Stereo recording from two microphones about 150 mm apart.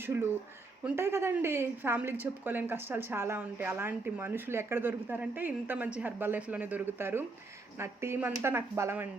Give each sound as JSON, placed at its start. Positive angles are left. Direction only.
{"t": 0.0, "sound": "a woman's voice", "side_deg": -15}